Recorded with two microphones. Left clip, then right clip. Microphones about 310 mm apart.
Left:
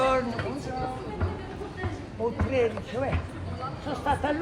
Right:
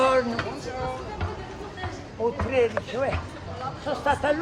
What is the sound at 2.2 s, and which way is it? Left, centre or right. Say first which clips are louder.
Speech: right 3 dB; right.